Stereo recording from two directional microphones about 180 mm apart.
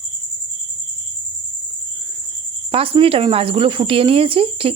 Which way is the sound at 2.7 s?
30° right (ahead or behind).